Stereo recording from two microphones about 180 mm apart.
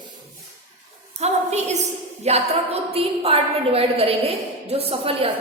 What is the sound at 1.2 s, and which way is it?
A woman's voice, 40° right (ahead or behind).